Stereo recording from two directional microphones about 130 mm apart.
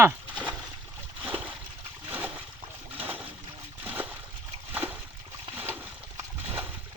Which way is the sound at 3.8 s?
15° right (ahead or behind).